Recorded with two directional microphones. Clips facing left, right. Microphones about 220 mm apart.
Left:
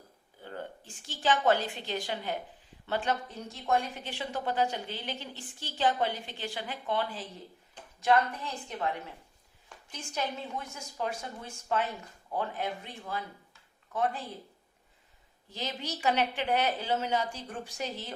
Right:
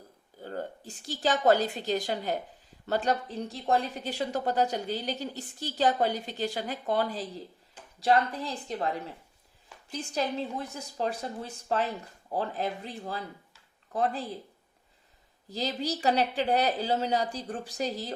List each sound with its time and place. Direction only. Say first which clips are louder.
0.4 s a woman's voice: right 5 dB; 40° right (ahead or behind)
10.2 s a woman's voice: right 4 dB; 35° right (ahead or behind)
15.4 s a woman's voice: right 6 dB; 35° right (ahead or behind)